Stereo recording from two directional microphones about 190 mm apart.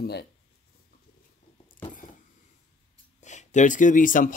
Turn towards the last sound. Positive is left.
turn(degrees=45)  # may be behind; listen again after turning